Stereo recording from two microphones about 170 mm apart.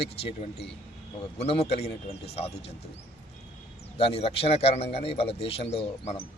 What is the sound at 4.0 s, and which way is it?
A man's voice, 35° left (ahead or behind).